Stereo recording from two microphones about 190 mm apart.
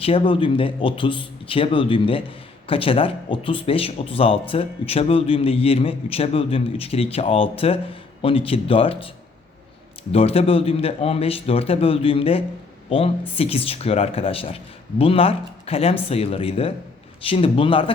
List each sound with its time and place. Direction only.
0.0 s speech: 30° left (ahead or behind)
10.1 s speech: 30° left (ahead or behind)